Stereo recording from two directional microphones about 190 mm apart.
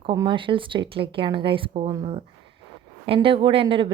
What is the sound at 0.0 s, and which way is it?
A woman's voice, 25° right (ahead or behind).